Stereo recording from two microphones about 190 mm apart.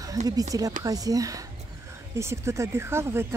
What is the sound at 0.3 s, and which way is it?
Speech, 20° right (ahead or behind).